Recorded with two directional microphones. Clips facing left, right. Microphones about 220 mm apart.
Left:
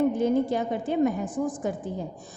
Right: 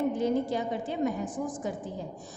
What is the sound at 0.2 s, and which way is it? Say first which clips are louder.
A woman's voice: left 4 dB; 50° left (ahead or behind).